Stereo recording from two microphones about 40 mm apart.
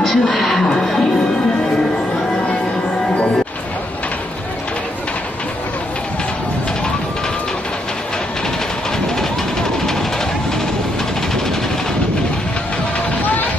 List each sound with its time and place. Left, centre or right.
0.0 s speech: centre
0.7 s music: centre
9.1 s train: centre